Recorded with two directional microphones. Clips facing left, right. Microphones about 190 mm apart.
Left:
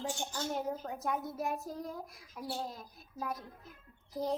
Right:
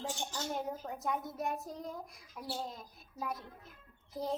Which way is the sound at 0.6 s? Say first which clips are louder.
Left 2 dB; centre (ahead or behind).